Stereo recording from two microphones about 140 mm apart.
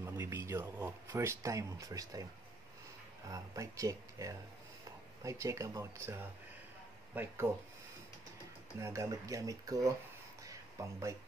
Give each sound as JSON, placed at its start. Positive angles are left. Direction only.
{"t": 0.0, "sound": "speech", "side_deg": -20}
{"t": 3.3, "sound": "speech", "side_deg": -25}
{"t": 7.5, "sound": "speech", "side_deg": -15}
{"t": 8.8, "sound": "speech", "side_deg": -20}
{"t": 10.4, "sound": "a sound", "side_deg": -20}